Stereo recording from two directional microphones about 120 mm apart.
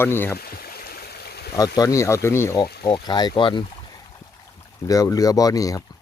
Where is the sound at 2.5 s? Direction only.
40° left (ahead or behind).